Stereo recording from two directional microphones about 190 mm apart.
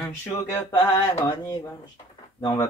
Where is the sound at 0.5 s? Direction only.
15° left (ahead or behind).